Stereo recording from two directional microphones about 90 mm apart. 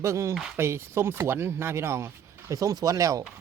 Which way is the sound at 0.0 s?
35° right (ahead or behind).